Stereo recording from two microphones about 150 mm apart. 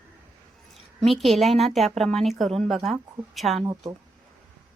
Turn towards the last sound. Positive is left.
turn(degrees=-25)  # may be behind; listen again after turning